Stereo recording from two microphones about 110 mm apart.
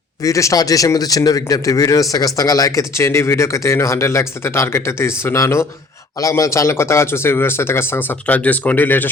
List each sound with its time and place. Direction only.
0.2 s a man's voice: 30° left (ahead or behind)